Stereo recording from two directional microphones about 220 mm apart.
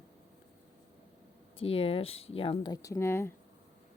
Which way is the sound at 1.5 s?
25° left (ahead or behind).